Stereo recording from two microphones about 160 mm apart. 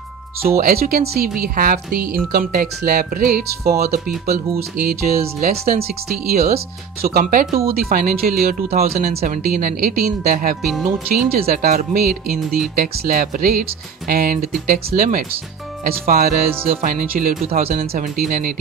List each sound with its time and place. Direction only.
0.6 s speech: 65° right (ahead or behind)